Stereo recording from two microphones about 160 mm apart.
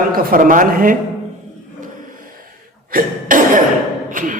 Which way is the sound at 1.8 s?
55° right (ahead or behind).